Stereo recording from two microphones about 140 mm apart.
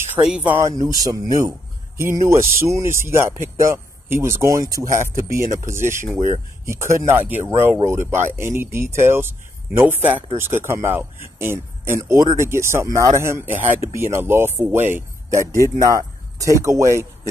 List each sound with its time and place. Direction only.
0.1 s speech: 5° right (ahead or behind)
0.6 s speech: 25° right (ahead or behind)